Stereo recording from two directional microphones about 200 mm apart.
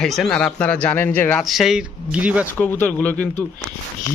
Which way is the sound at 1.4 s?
Centre (ahead or behind).